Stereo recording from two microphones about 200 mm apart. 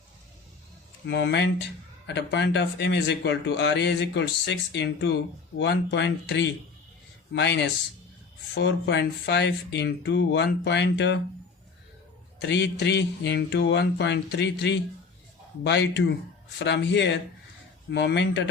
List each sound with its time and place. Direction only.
1.0 s speech: 55° left (ahead or behind)
12.4 s speech: 60° left (ahead or behind)